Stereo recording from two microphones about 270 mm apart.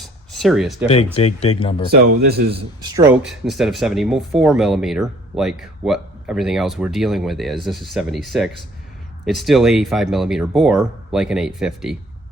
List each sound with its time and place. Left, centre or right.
0.0 s a sound: centre
0.9 s speech: left
1.9 s speech: right
2.5 s a man's voice: centre
3.2 s speech: centre